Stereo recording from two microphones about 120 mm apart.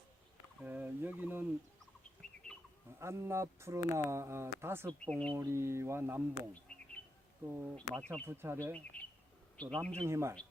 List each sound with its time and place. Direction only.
0.6 s speech: 15° right (ahead or behind)
3.0 s speech: 25° right (ahead or behind)
4.9 s a man's voice: 10° left (ahead or behind)
5.3 s speech: 25° right (ahead or behind)
6.7 s bird: 10° left (ahead or behind)
7.5 s speech: 10° right (ahead or behind)
7.8 s a man's voice: 10° left (ahead or behind)
8.3 s speech: 20° right (ahead or behind)
8.7 s a man's voice: 10° left (ahead or behind)
10.0 s speech: 25° right (ahead or behind)